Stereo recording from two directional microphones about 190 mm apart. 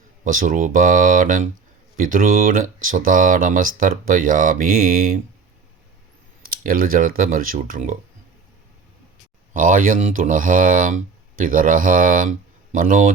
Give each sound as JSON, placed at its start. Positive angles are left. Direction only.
{"t": 0.3, "sound": "speech", "side_deg": -45}
{"t": 6.5, "sound": "speech", "side_deg": -50}
{"t": 9.5, "sound": "speech", "side_deg": -45}